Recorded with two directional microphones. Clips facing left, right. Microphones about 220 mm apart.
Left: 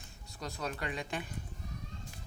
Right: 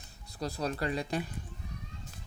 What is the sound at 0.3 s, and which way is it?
Speech, 35° right (ahead or behind).